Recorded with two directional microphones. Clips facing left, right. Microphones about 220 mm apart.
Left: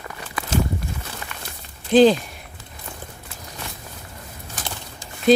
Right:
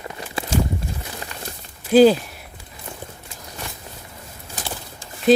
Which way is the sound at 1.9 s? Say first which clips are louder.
Right 1 dB; 10° right (ahead or behind).